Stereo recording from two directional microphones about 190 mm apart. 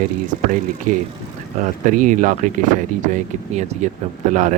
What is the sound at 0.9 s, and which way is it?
Speech, 45° right (ahead or behind).